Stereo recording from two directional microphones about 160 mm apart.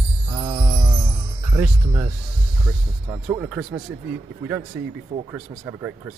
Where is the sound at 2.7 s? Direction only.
5° right (ahead or behind).